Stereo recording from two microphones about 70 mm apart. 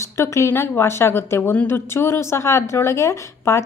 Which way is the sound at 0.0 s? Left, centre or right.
Left.